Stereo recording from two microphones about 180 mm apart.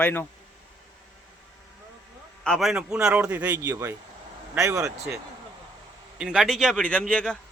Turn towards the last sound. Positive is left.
turn(degrees=5)  # may be behind; listen again after turning